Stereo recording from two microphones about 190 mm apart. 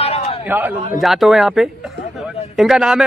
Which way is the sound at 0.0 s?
30° left (ahead or behind).